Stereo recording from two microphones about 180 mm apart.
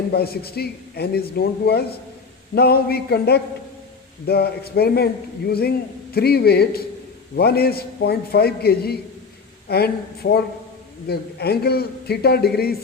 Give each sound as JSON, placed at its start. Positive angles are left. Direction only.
{"t": 0.1, "sound": "a man's voice", "side_deg": 60}